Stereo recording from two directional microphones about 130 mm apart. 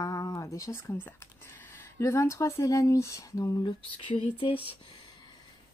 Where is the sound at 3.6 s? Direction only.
40° left (ahead or behind).